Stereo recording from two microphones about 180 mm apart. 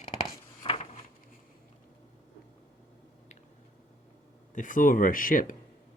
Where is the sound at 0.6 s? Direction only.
30° left (ahead or behind).